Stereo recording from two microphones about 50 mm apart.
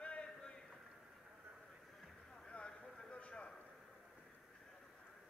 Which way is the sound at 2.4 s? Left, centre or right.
Left.